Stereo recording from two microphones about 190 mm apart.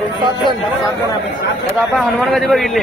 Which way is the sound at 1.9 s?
Centre (ahead or behind).